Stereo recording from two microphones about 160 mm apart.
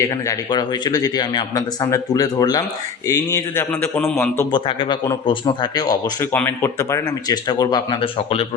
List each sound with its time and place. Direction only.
0.0 s a man's voice: 25° left (ahead or behind); by 4.3 s 5° left (ahead or behind)
4.5 s a man's voice: 30° left (ahead or behind)